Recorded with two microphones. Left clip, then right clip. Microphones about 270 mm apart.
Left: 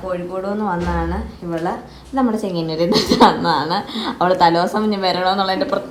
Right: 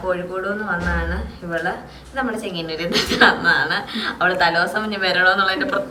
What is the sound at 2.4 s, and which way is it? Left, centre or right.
A woman's voice, centre.